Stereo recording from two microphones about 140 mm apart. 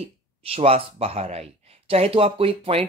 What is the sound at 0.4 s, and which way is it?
Speech, 45° right (ahead or behind).